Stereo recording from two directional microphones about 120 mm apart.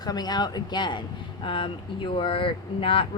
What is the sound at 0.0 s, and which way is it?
Speech, 35° left (ahead or behind).